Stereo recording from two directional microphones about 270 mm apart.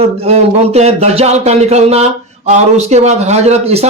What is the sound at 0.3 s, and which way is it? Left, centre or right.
Speech, right.